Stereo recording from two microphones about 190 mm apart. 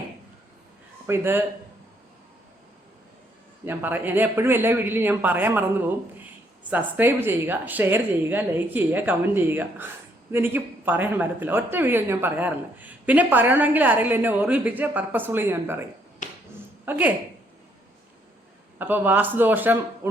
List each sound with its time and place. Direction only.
1.0 s speech: 10° right (ahead or behind)
3.7 s speech: 10° right (ahead or behind)
6.7 s speech: 10° right (ahead or behind)
16.2 s finger snapping: 40° left (ahead or behind)
16.8 s a woman's voice: 10° right (ahead or behind)
18.8 s speech: 10° right (ahead or behind)